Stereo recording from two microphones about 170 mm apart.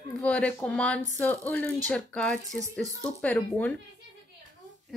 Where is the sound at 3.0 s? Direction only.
10° left (ahead or behind).